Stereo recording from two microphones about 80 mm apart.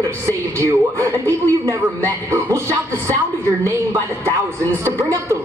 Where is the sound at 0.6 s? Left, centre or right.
Right.